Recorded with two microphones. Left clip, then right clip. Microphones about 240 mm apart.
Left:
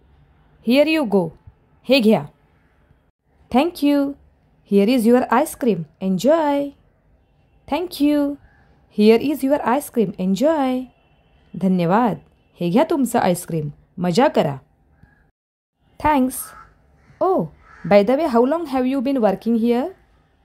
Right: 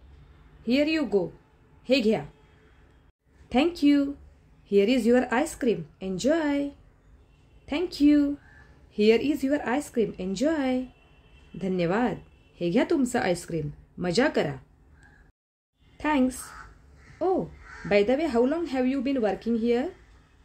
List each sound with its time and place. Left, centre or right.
0.6 s a woman's voice: left
3.4 s speech: left
16.0 s speech: left